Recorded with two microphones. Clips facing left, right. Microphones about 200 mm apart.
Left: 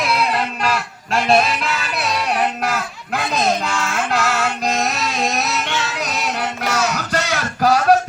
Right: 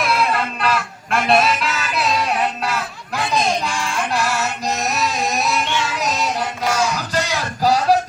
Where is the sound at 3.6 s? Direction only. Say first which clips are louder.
Left 1 dB; 50° left (ahead or behind).